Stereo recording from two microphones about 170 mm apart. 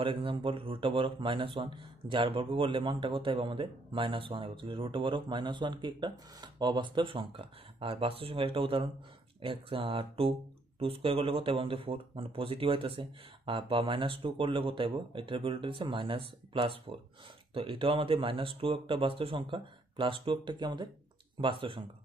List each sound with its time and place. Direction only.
0.0 s speech: 30° right (ahead or behind)